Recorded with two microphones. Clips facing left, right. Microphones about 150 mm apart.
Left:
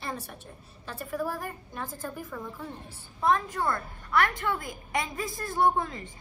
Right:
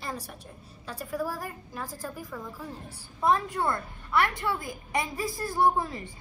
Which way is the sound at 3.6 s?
15° right (ahead or behind).